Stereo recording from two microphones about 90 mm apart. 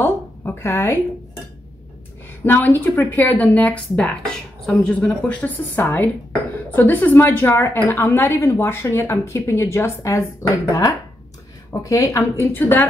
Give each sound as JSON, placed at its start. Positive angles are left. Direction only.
{"t": 0.0, "sound": "a woman's voice", "side_deg": 25}
{"t": 2.4, "sound": "a woman's voice", "side_deg": 20}
{"t": 10.7, "sound": "a woman's voice", "side_deg": 40}